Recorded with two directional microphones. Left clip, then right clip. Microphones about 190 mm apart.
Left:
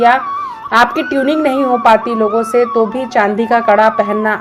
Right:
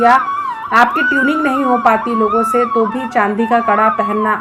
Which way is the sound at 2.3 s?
20° left (ahead or behind).